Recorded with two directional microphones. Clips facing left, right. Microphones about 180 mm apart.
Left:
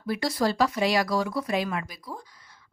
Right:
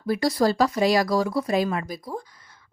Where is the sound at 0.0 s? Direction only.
40° right (ahead or behind).